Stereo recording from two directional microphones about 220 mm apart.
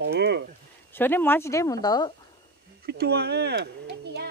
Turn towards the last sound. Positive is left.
turn(degrees=-50)  # may be behind; listen again after turning